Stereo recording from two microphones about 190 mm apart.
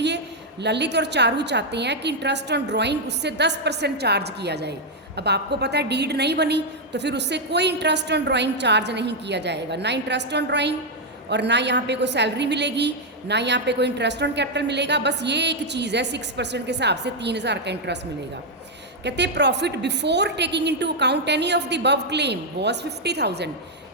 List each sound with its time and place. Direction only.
0.6 s a woman's voice: 65° right (ahead or behind)
19.0 s a woman's voice: 65° right (ahead or behind)